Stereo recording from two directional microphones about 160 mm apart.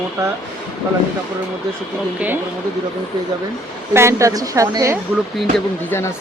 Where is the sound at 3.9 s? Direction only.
20° right (ahead or behind).